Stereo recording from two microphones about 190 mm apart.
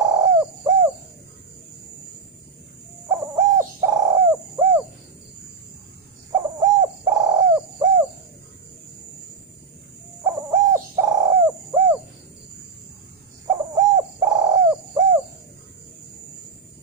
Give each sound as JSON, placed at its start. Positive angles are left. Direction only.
{"t": 0.0, "sound": "bird", "side_deg": -15}
{"t": 3.1, "sound": "bird", "side_deg": -10}
{"t": 6.3, "sound": "bird", "side_deg": -15}
{"t": 10.2, "sound": "bird", "side_deg": -10}
{"t": 13.5, "sound": "bird", "side_deg": -15}